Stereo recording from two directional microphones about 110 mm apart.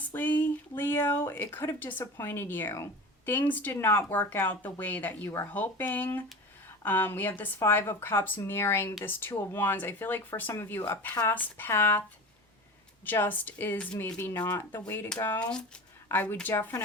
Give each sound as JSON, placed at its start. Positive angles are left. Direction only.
{"t": 0.1, "sound": "speech", "side_deg": 15}
{"t": 13.1, "sound": "speech", "side_deg": 15}
{"t": 14.5, "sound": "speech", "side_deg": 20}